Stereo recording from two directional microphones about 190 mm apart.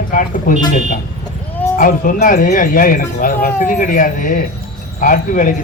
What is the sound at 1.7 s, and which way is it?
Speech, 45° left (ahead or behind).